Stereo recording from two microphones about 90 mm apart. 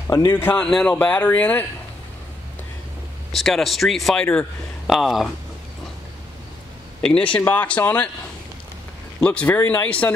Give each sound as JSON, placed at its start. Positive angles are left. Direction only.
{"t": 0.3, "sound": "speech", "side_deg": 25}
{"t": 0.6, "sound": "speech", "side_deg": 10}
{"t": 3.3, "sound": "speech", "side_deg": 0}
{"t": 4.8, "sound": "speech", "side_deg": 0}
{"t": 7.0, "sound": "speech", "side_deg": 10}
{"t": 9.2, "sound": "speech", "side_deg": 15}